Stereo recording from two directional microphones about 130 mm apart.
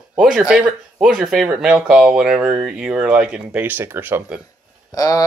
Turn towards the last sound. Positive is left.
turn(degrees=30)  # may be behind; listen again after turning